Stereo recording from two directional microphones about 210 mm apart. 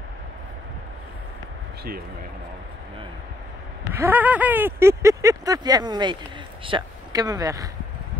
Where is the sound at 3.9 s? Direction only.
10° right (ahead or behind).